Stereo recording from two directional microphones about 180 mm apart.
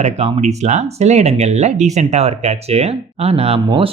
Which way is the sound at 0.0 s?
35° right (ahead or behind).